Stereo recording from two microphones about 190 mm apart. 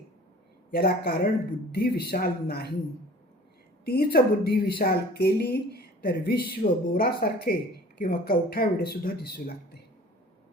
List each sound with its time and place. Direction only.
0.7 s speech: 55° left (ahead or behind)
3.8 s a woman's voice: 55° left (ahead or behind)